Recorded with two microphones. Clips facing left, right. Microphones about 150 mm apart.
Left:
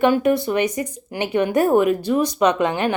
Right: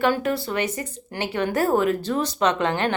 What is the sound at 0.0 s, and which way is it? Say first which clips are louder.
Speech: left 5 dB; 20° left (ahead or behind).